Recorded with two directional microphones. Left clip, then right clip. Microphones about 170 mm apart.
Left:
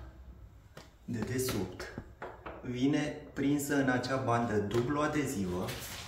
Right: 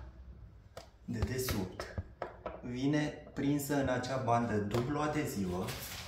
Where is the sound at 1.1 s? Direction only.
5° right (ahead or behind).